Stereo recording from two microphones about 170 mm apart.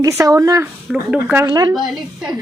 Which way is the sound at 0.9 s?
5° right (ahead or behind).